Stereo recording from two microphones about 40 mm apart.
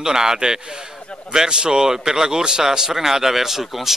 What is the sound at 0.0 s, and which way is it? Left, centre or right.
A man's voice, centre.